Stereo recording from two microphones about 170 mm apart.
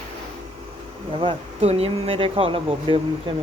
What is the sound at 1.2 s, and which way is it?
Speech, 35° right (ahead or behind).